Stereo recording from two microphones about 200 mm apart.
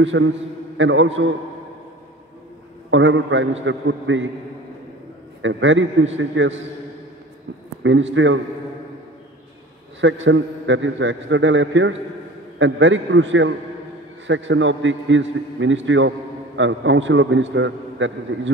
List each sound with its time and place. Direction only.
0.0 s a man's voice: 70° right (ahead or behind)
2.9 s a man's voice: 70° right (ahead or behind)
5.4 s a man's voice: 70° right (ahead or behind)
7.8 s a man's voice: 70° right (ahead or behind)
9.9 s a man's voice: 70° right (ahead or behind)